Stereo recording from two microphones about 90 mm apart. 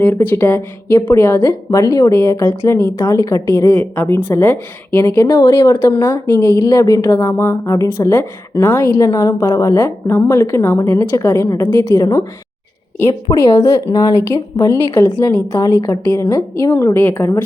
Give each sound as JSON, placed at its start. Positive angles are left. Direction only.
{"t": 0.0, "sound": "speech", "side_deg": 20}
{"t": 1.8, "sound": "speech", "side_deg": 40}
{"t": 3.2, "sound": "speech", "side_deg": 40}
{"t": 13.4, "sound": "speech", "side_deg": 40}
{"t": 16.0, "sound": "speech", "side_deg": 20}
{"t": 16.3, "sound": "speech", "side_deg": 35}